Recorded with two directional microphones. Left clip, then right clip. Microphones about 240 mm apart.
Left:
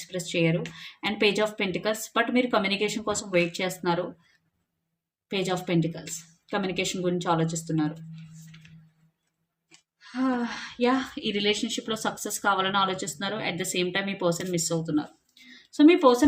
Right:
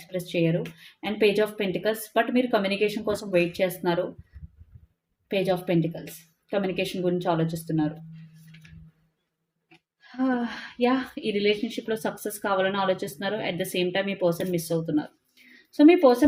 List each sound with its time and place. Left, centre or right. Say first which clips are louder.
0.1 s speech: right 1 dB; centre
5.3 s speech: right 3 dB; centre
10.2 s speech: right 1 dB; centre